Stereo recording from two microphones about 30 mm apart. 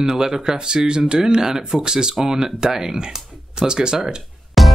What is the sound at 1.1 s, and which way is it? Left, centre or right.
Speech, right.